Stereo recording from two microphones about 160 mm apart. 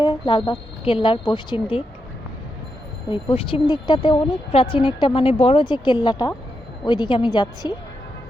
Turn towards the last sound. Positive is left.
turn(degrees=25)  # may be behind; listen again after turning